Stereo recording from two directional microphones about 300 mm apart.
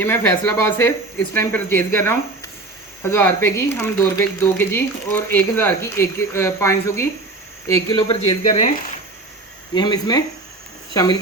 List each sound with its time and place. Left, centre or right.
0.0 s speech: centre
9.7 s speech: centre